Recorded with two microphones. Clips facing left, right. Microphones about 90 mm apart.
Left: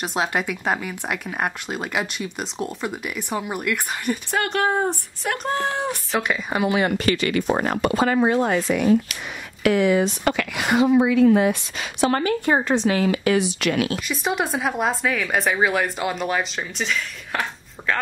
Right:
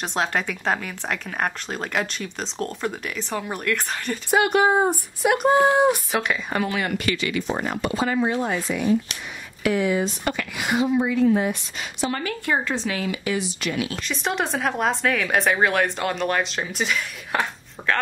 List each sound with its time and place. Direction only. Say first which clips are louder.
0.0 s speech: left 1 dB; 5° left (ahead or behind)
4.3 s speech: right 5 dB; 10° right (ahead or behind)
6.2 s speech: left 1 dB; centre (ahead or behind)
6.6 s speech: left 4 dB; 25° left (ahead or behind)
7.1 s speech: left 4 dB; 50° left (ahead or behind); by 12.1 s 90° left
12.2 s speech: left 4 dB; 25° left (ahead or behind)
12.9 s speech: left 7 dB; 40° left (ahead or behind)
13.2 s speech: left 6 dB; 70° left (ahead or behind)
14.0 s speech: left 1 dB; 5° left (ahead or behind)